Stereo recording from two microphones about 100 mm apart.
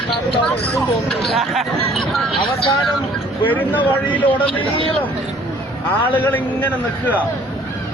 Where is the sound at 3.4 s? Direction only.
20° left (ahead or behind).